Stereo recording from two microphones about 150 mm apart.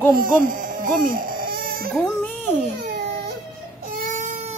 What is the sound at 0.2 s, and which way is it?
Speech, 65° right (ahead or behind).